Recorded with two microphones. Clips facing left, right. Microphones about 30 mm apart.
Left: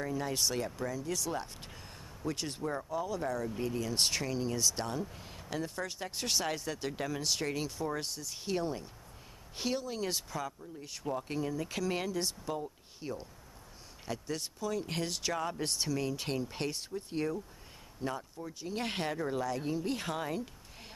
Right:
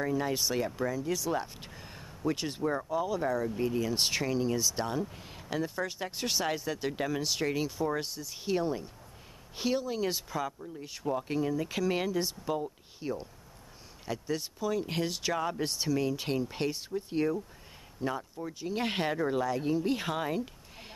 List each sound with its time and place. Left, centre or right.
0.0 s speech: centre